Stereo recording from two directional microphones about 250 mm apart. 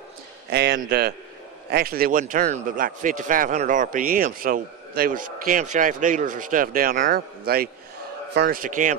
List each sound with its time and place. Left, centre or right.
0.5 s a man's voice: right